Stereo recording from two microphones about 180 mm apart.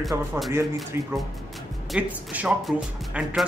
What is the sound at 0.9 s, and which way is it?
Speech, 10° right (ahead or behind).